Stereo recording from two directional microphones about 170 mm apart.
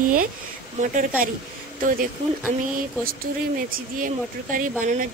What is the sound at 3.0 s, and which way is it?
Speech, 60° right (ahead or behind).